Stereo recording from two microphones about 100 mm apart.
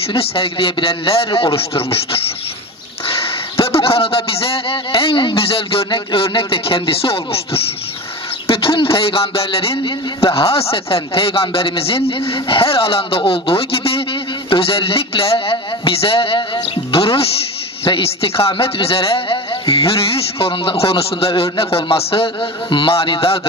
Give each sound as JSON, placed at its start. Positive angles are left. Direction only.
{"t": 0.1, "sound": "speech", "side_deg": 75}
{"t": 3.6, "sound": "a man's voice", "side_deg": 70}